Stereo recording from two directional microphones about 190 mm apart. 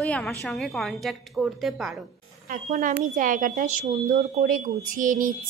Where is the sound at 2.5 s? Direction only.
45° right (ahead or behind).